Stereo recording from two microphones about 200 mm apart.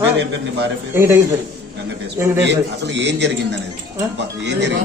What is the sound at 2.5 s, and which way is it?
A man's voice, 60° right (ahead or behind).